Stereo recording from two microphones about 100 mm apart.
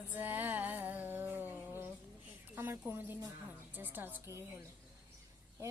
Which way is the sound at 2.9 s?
20° right (ahead or behind).